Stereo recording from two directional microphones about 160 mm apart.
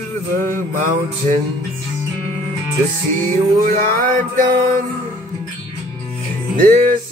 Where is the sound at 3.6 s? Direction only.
60° right (ahead or behind).